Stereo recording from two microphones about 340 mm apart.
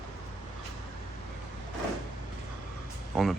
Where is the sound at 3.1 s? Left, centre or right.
Centre.